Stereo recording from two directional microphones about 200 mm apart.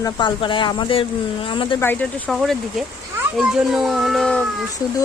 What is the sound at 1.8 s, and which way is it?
Speech, 10° left (ahead or behind).